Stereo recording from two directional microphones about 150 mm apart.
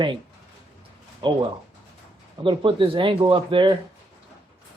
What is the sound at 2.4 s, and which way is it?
Speech, 35° right (ahead or behind).